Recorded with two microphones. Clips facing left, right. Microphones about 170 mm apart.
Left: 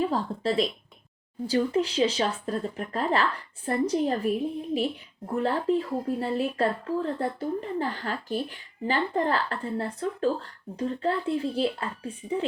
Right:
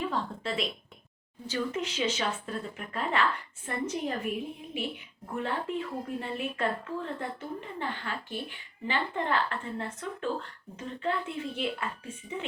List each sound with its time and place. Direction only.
0.0 s speech: 35° left (ahead or behind)